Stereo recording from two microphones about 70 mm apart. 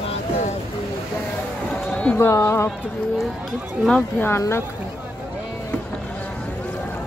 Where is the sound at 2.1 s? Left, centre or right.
Left.